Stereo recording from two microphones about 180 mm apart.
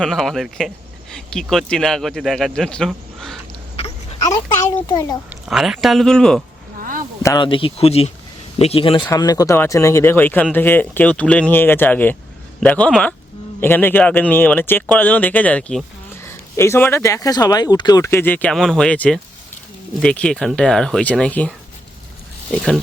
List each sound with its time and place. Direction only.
0.0 s speech: centre (ahead or behind)
3.8 s a sound: 35° left (ahead or behind)
4.2 s a child's voice: 20° left (ahead or behind)
5.3 s speech: centre (ahead or behind)
7.2 s a child's voice: 20° left (ahead or behind)
22.5 s speech: centre (ahead or behind)